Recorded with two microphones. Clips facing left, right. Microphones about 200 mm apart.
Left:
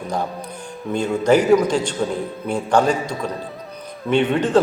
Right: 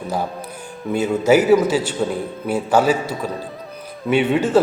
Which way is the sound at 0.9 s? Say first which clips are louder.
Right 1 dB; 5° right (ahead or behind).